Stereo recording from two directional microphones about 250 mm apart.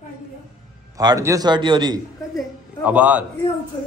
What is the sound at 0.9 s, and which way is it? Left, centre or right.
A man's voice, centre.